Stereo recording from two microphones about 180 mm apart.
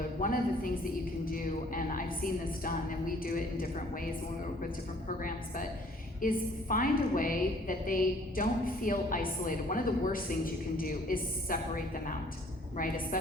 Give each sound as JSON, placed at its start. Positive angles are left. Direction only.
{"t": 0.2, "sound": "a woman's voice", "side_deg": 50}
{"t": 5.0, "sound": "a woman's voice", "side_deg": 50}
{"t": 12.7, "sound": "a woman's voice", "side_deg": 50}